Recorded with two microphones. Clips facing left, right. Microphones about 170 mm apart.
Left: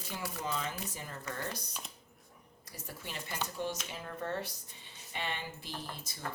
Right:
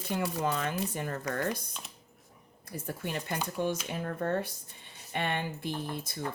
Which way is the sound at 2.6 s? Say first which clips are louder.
Right 9 dB; 55° right (ahead or behind).